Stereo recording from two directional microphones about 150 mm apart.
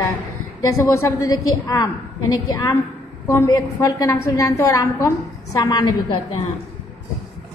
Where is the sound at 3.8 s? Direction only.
25° left (ahead or behind).